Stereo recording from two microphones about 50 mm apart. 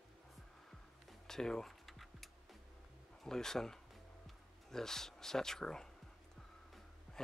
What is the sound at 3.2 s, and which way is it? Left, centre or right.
Speech, centre.